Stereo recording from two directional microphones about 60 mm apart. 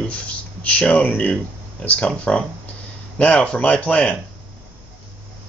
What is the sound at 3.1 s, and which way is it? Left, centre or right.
Speech, centre.